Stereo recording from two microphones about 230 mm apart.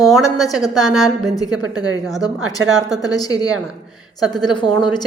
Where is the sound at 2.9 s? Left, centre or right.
Centre.